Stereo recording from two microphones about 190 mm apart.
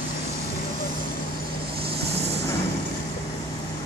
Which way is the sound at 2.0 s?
60° right (ahead or behind).